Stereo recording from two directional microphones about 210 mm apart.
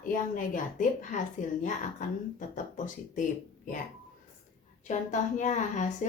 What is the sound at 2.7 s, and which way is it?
Speech, 40° left (ahead or behind).